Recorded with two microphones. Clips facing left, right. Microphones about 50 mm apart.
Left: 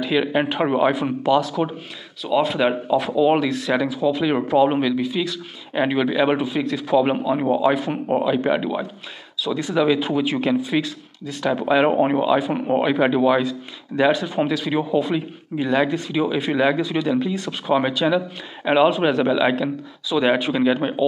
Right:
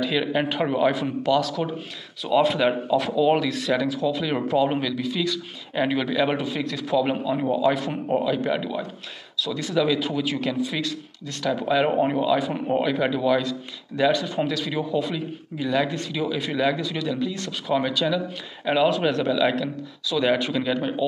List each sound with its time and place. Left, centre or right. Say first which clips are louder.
0.0 s speech: left 3 dB; centre
2.2 s speech: even; centre
2.6 s speech: left 2 dB; centre
9.7 s speech: left 3 dB; left
13.0 s speech: left 4 dB; left